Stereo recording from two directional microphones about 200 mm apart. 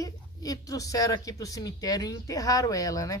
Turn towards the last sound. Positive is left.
turn(degrees=15)  # may be behind; listen again after turning